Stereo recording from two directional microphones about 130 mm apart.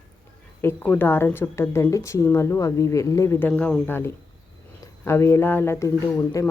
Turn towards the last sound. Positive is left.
turn(degrees=25)  # may be behind; listen again after turning